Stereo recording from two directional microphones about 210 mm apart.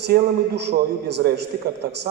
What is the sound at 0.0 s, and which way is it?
A man's voice, 55° right (ahead or behind).